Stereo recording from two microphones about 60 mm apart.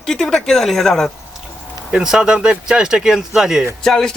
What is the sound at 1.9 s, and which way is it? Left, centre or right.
A man's voice, centre.